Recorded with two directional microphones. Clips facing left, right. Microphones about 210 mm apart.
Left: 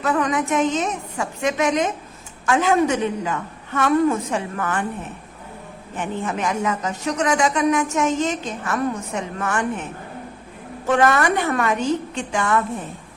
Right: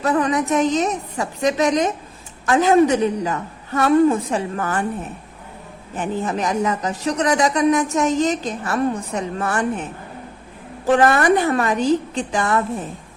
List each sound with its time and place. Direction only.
0.0 s speech: 35° right (ahead or behind)
6.0 s speech: 35° right (ahead or behind)